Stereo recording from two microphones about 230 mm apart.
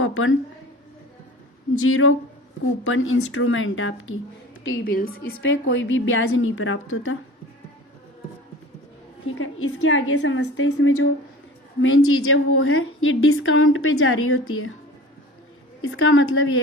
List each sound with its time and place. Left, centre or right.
0.0 s a woman's voice: left
1.8 s a woman's voice: left
4.8 s a woman's voice: left
5.3 s a woman's voice: left
9.2 s a woman's voice: left
15.8 s a woman's voice: left